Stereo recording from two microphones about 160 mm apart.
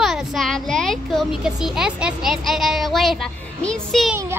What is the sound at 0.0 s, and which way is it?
A child's voice, centre (ahead or behind).